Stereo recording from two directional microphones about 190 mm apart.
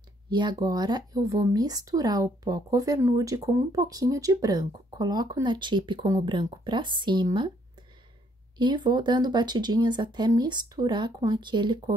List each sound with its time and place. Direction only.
0.3 s speech: 25° right (ahead or behind)
8.5 s speech: 25° right (ahead or behind)